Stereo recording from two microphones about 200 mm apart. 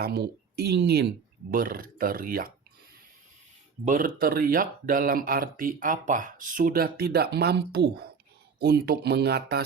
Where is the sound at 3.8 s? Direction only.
40° right (ahead or behind).